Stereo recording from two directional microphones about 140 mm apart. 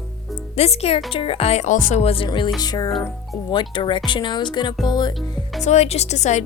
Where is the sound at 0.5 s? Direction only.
50° left (ahead or behind).